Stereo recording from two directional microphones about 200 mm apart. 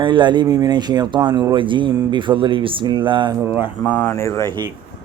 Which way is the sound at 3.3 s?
10° right (ahead or behind).